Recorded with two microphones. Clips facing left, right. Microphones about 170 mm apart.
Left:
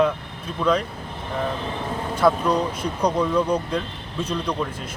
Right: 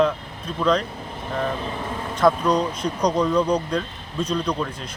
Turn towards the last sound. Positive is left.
turn(degrees=5)  # may be behind; listen again after turning